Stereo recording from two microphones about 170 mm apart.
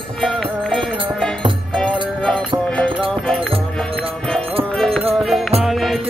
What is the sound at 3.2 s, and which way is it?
Music, 5° left (ahead or behind).